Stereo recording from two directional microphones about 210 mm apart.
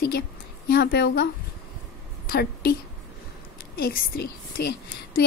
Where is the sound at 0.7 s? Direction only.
50° left (ahead or behind).